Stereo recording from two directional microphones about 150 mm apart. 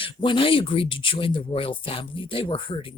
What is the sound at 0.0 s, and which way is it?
Speech, 35° left (ahead or behind).